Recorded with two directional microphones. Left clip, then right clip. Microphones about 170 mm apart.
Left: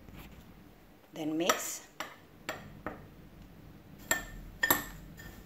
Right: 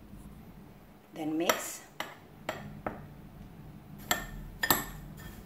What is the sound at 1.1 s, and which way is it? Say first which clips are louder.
Speech: right 1 dB; 25° left (ahead or behind).